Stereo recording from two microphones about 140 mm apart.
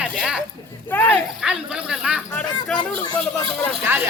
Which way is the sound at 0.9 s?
15° left (ahead or behind).